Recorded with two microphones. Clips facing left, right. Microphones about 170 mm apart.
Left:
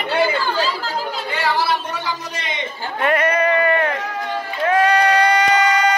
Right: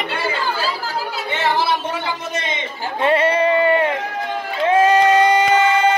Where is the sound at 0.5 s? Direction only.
5° right (ahead or behind).